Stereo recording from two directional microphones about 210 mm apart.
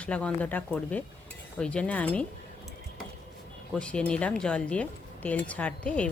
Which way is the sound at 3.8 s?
5° left (ahead or behind).